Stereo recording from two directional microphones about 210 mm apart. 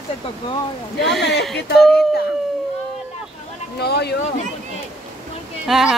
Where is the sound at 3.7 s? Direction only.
50° left (ahead or behind).